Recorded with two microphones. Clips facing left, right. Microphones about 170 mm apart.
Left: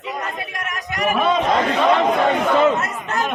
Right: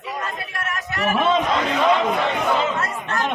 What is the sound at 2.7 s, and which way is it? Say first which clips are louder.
Chatter: left 2 dB; 20° left (ahead or behind).